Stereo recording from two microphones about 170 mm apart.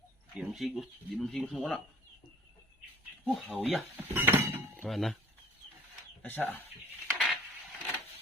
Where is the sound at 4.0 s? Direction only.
15° right (ahead or behind).